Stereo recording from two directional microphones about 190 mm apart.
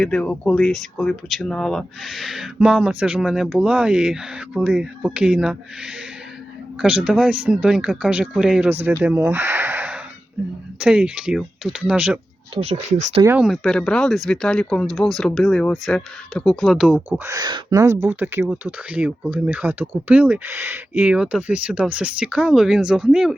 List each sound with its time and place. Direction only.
0.0 s speech: 5° left (ahead or behind)
12.5 s speech: 35° right (ahead or behind)
13.2 s speech: 5° right (ahead or behind)
17.3 s speech: 20° right (ahead or behind); by 23.3 s centre (ahead or behind)